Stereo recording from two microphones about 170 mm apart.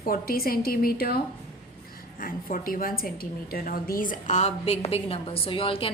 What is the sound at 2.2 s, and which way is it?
A woman's voice, 55° left (ahead or behind).